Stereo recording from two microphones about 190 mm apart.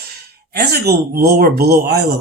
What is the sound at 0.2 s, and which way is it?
Speech, 55° right (ahead or behind).